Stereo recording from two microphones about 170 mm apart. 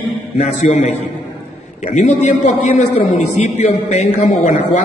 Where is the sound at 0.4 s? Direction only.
40° left (ahead or behind).